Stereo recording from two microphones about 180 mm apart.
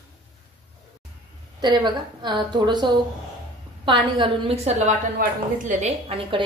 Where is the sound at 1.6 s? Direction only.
25° right (ahead or behind).